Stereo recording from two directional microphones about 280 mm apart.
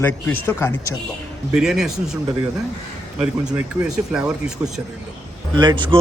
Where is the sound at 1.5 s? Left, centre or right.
Centre.